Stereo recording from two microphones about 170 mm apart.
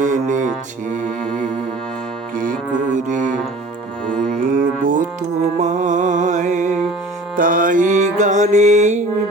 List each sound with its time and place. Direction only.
0.0 s music: 45° right (ahead or behind)
2.3 s music: 50° right (ahead or behind)